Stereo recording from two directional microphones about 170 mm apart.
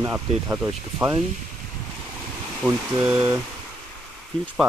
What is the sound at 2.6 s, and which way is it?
Speech, 5° right (ahead or behind).